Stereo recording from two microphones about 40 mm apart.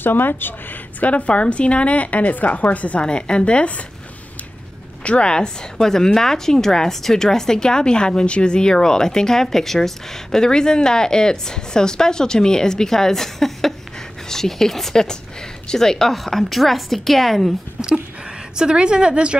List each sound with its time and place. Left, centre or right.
0.0 s speech: left
1.0 s a woman's voice: left
3.0 s speech: left
5.0 s a woman's voice: left; by 17.6 s centre
18.6 s a woman's voice: right